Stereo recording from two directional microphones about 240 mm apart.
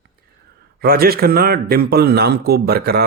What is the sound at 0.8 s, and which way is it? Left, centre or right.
Speech, right.